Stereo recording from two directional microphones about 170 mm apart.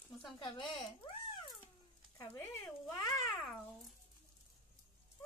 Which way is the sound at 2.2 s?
15° left (ahead or behind).